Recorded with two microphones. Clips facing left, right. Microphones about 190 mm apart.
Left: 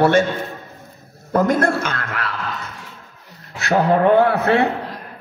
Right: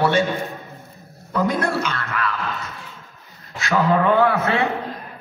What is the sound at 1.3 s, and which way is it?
Mantra, 50° left (ahead or behind).